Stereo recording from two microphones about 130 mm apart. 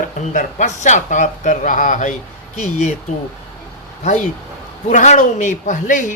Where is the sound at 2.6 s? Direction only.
60° left (ahead or behind).